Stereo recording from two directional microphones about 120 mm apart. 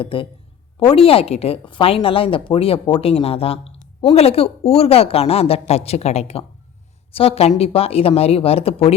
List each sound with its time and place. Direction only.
0.0 s a woman's voice: 45° left (ahead or behind)